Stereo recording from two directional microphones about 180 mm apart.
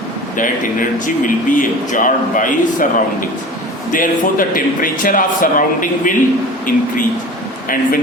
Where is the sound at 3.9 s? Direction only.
50° left (ahead or behind).